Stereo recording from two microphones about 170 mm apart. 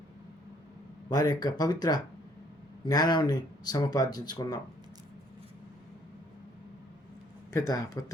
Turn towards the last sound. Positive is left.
turn(degrees=20)  # may be behind; listen again after turning